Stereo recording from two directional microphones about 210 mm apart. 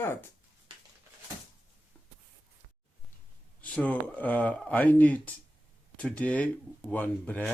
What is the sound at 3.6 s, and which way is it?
Speech, 5° left (ahead or behind).